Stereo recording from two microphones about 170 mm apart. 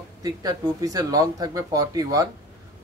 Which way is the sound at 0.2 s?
20° right (ahead or behind).